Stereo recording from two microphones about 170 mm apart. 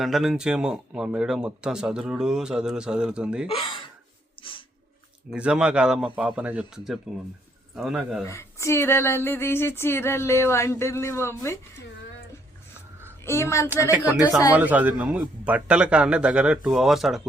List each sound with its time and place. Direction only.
0.0 s speech: centre (ahead or behind)
3.4 s speech: 30° left (ahead or behind)
4.4 s a sound: 30° left (ahead or behind)
5.3 s speech: 5° right (ahead or behind)
8.2 s speech: 15° left (ahead or behind)
13.2 s speech: 15° left (ahead or behind)
14.5 s a man's voice: 10° right (ahead or behind)